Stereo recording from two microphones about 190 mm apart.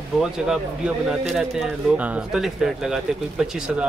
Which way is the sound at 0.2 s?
5° right (ahead or behind).